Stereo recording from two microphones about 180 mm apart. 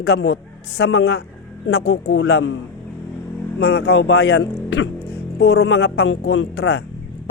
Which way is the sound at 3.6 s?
65° left (ahead or behind).